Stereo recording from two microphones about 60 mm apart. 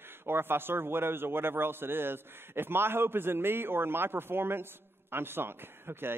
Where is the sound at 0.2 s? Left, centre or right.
Right.